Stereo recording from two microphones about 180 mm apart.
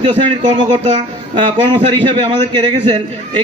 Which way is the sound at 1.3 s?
25° right (ahead or behind).